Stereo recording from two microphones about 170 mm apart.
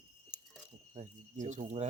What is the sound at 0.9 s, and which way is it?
Speech, 45° right (ahead or behind).